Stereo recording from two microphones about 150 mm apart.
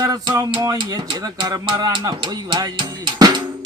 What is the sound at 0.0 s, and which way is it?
Speech, 25° right (ahead or behind).